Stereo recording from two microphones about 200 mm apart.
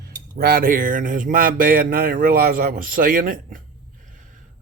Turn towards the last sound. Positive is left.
turn(degrees=-45)  # may be behind; listen again after turning